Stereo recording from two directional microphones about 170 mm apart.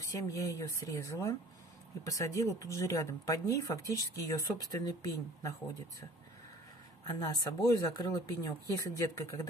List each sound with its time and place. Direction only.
0.0 s speech: 20° left (ahead or behind)
7.1 s speech: 20° left (ahead or behind)